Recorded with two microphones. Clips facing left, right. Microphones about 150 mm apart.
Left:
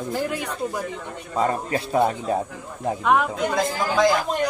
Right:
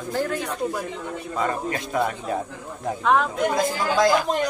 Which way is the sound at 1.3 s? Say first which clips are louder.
Left 3 dB; 30° left (ahead or behind).